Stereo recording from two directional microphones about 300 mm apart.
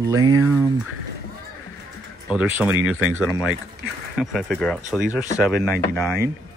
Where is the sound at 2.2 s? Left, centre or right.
Centre.